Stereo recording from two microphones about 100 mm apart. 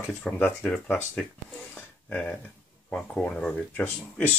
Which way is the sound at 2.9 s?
5° left (ahead or behind).